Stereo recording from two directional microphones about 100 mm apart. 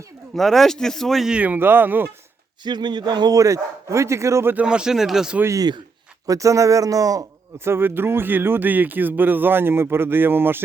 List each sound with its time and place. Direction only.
0.3 s speech: centre (ahead or behind); by 2.0 s 20° right (ahead or behind)
2.6 s speech: 45° right (ahead or behind); by 4.5 s 30° right (ahead or behind)
4.5 s speech: 10° right (ahead or behind)
5.5 s speech: 45° right (ahead or behind)
6.2 s speech: 35° right (ahead or behind)
7.6 s speech: 25° right (ahead or behind)